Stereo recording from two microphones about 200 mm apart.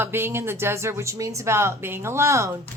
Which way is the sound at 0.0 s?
10° right (ahead or behind).